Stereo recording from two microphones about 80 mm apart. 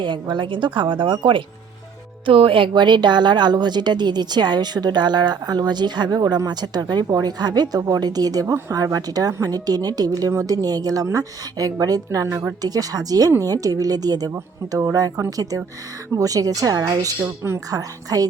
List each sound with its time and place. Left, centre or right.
0.0 s a woman's voice: right
14.3 s speech: right
15.4 s a woman's voice: right
17.2 s speech: right
17.7 s a woman's voice: right